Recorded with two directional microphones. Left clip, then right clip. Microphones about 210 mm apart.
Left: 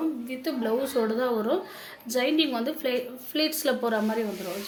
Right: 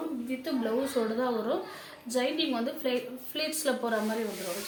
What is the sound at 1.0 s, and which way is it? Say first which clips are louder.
Speech: left 5 dB; 45° left (ahead or behind).